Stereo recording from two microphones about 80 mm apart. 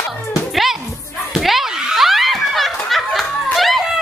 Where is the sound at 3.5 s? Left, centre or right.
Centre.